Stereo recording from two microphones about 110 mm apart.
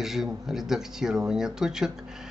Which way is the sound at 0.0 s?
5° right (ahead or behind).